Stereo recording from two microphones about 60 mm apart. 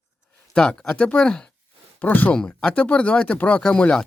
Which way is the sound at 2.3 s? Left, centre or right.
Centre.